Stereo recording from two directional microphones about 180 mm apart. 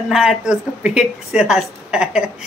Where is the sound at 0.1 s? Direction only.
5° right (ahead or behind).